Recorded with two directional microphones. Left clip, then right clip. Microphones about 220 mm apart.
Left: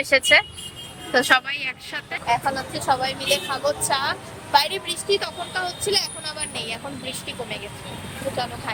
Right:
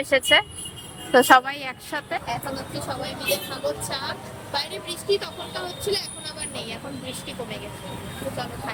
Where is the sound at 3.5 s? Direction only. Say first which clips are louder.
Left 6 dB; centre (ahead or behind).